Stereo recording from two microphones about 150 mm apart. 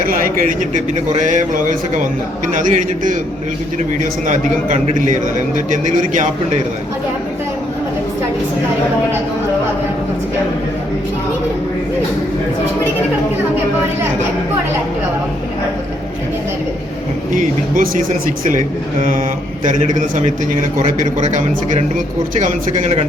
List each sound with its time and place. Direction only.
0.0 s a man's voice: 70° right (ahead or behind)
4.3 s a man's voice: 55° right (ahead or behind)
17.3 s a man's voice: 60° right (ahead or behind)
19.6 s a man's voice: 55° right (ahead or behind)